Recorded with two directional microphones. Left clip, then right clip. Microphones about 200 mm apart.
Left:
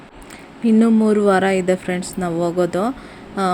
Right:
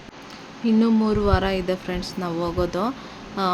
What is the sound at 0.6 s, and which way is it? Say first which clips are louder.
Speech: left 5 dB; 20° left (ahead or behind).